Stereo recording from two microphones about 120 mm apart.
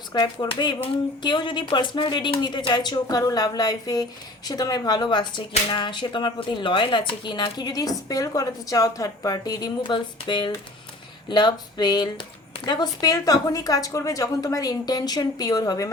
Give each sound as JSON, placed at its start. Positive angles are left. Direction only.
{"t": 0.1, "sound": "speech", "side_deg": 35}